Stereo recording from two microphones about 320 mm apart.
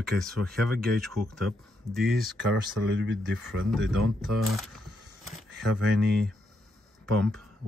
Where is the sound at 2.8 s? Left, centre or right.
Right.